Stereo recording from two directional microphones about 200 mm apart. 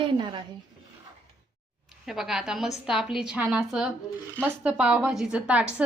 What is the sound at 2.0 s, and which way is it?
A woman's voice, centre (ahead or behind).